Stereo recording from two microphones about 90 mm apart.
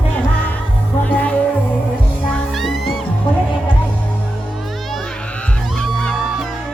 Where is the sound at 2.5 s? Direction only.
Centre (ahead or behind).